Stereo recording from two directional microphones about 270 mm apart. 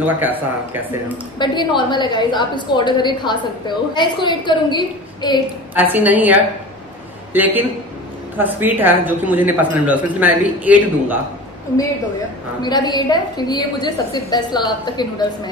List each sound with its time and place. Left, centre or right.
0.0 s a woman's voice: centre
1.4 s a woman's voice: centre
5.8 s a woman's voice: centre
7.3 s a woman's voice: centre
12.6 s a woman's voice: centre